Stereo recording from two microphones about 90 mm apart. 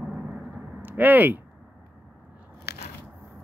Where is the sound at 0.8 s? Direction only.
20° right (ahead or behind).